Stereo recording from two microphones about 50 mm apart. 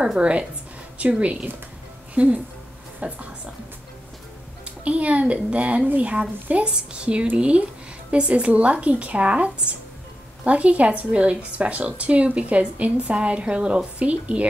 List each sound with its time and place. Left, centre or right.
0.2 s a woman's voice: right
4.8 s a woman's voice: right